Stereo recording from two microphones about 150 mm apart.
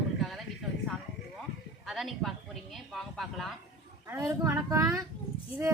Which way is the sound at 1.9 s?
Centre (ahead or behind).